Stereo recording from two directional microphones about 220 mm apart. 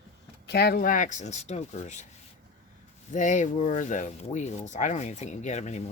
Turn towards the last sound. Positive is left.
turn(degrees=30)  # may be behind; listen again after turning